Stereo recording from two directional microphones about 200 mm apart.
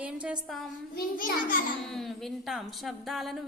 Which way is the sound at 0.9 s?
45° left (ahead or behind).